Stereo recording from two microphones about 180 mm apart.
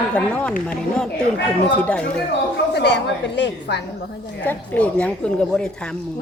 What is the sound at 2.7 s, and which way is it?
Speech, 70° left (ahead or behind).